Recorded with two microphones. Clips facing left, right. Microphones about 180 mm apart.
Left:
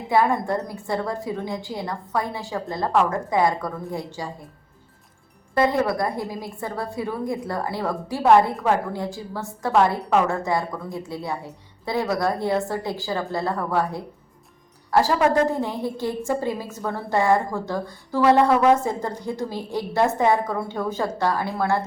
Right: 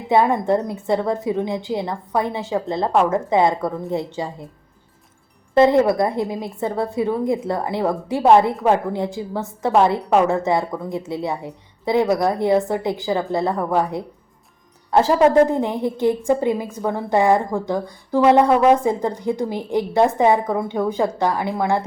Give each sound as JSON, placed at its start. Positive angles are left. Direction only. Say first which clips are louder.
{"t": 0.1, "sound": "a woman's voice", "louder": "right 4 dB", "side_deg": -20}
{"t": 5.5, "sound": "a woman's voice", "louder": "right 7 dB", "side_deg": -25}